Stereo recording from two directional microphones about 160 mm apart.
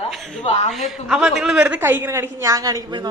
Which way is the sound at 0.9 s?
Centre (ahead or behind).